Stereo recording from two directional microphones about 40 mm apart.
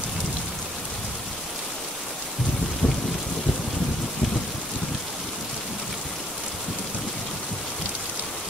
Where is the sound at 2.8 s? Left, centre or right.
Left.